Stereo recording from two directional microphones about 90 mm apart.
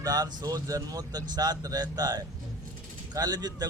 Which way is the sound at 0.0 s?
45° right (ahead or behind).